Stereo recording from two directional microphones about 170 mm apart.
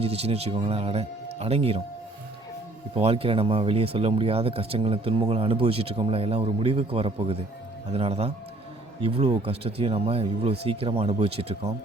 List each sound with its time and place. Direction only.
0.0 s speech: 35° right (ahead or behind)
2.9 s speech: 35° right (ahead or behind)